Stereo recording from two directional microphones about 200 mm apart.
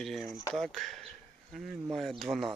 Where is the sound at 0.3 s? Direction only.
15° left (ahead or behind).